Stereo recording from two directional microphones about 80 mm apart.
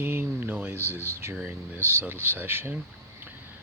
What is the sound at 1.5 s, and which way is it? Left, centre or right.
Speech, right.